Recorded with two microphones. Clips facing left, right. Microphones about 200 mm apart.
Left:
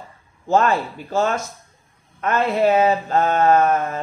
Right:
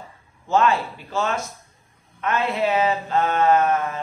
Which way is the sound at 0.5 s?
45° left (ahead or behind).